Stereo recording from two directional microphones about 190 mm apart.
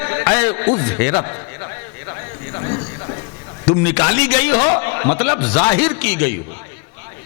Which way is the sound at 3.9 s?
15° left (ahead or behind).